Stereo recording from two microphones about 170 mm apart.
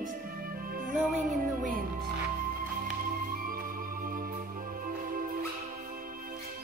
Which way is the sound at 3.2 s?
55° right (ahead or behind).